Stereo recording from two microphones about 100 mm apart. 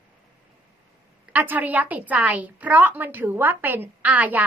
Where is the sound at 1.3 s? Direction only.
15° right (ahead or behind).